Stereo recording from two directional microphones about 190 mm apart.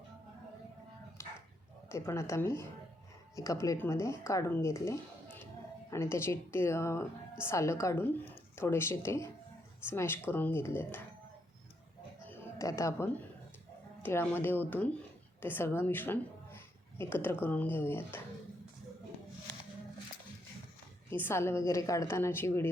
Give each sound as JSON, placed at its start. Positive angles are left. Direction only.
{"t": 1.2, "sound": "dog", "side_deg": 15}
{"t": 1.9, "sound": "speech", "side_deg": 15}
{"t": 12.3, "sound": "music", "side_deg": 15}
{"t": 14.0, "sound": "a woman's voice", "side_deg": 10}
{"t": 21.1, "sound": "speech", "side_deg": 10}